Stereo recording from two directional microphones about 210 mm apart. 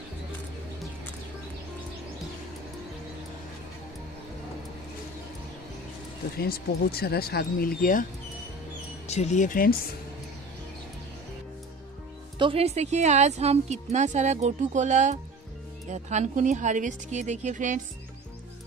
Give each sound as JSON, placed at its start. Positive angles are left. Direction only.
{"t": 6.3, "sound": "speech", "side_deg": 50}
{"t": 9.0, "sound": "speech", "side_deg": 30}
{"t": 12.4, "sound": "speech", "side_deg": -25}